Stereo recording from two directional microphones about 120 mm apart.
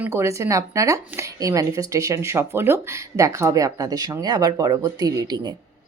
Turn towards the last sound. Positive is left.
turn(degrees=-35)  # may be behind; listen again after turning